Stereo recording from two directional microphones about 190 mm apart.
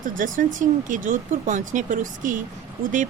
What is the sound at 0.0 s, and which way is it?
Speech, 45° right (ahead or behind).